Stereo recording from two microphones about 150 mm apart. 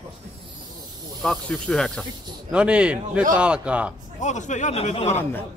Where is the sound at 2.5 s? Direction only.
5° right (ahead or behind).